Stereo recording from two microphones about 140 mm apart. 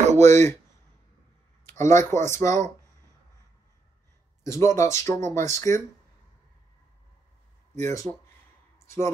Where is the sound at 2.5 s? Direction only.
55° right (ahead or behind).